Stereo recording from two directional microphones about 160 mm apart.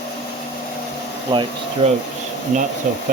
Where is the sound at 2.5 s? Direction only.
50° right (ahead or behind).